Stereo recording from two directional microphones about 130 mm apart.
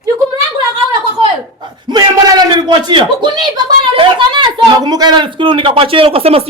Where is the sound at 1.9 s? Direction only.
30° right (ahead or behind).